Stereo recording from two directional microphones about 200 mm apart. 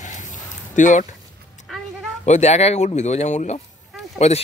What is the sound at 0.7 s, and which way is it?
Speech, 40° left (ahead or behind).